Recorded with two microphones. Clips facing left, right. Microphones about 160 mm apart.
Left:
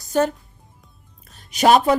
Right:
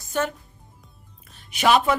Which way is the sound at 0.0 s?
35° left (ahead or behind).